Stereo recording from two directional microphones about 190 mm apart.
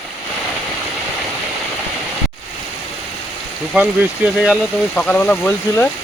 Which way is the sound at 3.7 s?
5° right (ahead or behind).